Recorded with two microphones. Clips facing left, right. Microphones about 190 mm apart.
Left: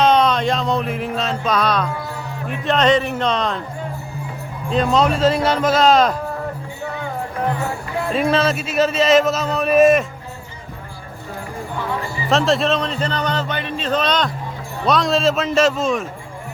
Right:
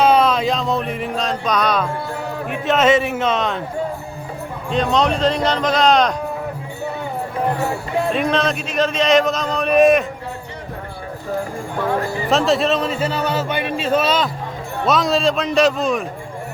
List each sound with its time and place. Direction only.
0.0 s music: 5° right (ahead or behind)
2.5 s a man's voice: 5° right (ahead or behind)
4.7 s a man's voice: 5° left (ahead or behind)
8.1 s a man's voice: 5° left (ahead or behind)
11.8 s a sound: 55° right (ahead or behind)
12.3 s a man's voice: centre (ahead or behind)